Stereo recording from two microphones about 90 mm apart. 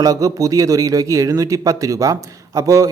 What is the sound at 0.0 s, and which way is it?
A man's voice, 40° right (ahead or behind).